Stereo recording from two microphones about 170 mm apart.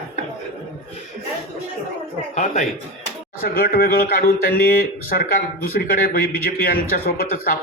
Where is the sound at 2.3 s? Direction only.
45° left (ahead or behind).